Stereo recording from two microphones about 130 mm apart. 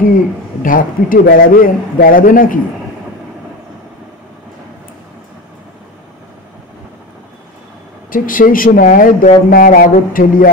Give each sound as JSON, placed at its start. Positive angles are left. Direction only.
{"t": 0.0, "sound": "a man's voice", "side_deg": 90}
{"t": 8.1, "sound": "a man's voice", "side_deg": 90}